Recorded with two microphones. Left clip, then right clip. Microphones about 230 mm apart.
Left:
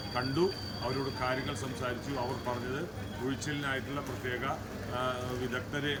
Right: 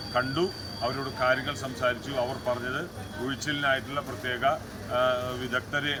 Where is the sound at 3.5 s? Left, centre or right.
Centre.